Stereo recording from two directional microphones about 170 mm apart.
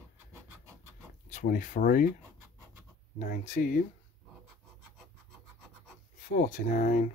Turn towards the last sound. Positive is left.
turn(degrees=55)  # may be behind; listen again after turning